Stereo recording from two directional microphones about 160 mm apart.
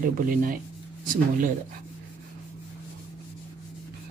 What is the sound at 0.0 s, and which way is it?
Speech, 60° right (ahead or behind).